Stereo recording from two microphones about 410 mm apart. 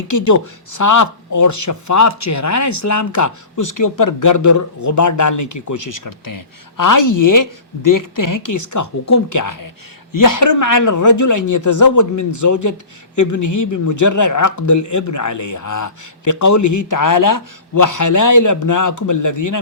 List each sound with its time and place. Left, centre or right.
0.1 s speech: left